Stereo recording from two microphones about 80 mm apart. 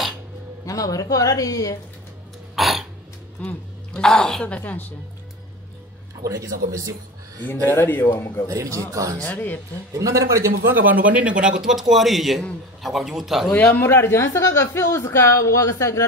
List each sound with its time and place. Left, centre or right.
0.7 s speech: left
2.5 s cough: centre
3.4 s a woman's voice: centre
6.2 s speech: right
7.6 s speech: left
8.5 s a man's voice: right
9.2 s speech: left
9.9 s speech: right
10.7 s a man's voice: right; by 13.5 s centre
13.7 s speech: left